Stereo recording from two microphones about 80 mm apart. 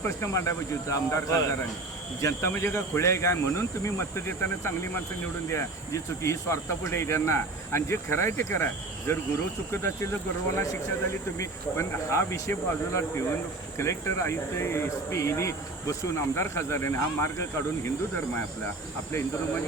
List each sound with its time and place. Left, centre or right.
0.2 s speech: left